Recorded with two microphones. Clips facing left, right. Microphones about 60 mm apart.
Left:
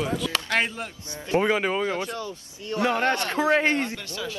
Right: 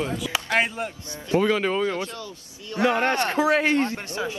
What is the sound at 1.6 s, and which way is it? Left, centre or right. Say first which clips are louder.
Speech: right 1 dB; centre.